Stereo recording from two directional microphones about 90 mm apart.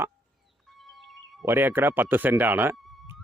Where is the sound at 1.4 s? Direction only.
25° right (ahead or behind).